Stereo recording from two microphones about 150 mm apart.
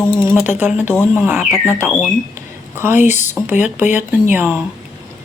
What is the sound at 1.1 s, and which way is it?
Speech, 15° right (ahead or behind).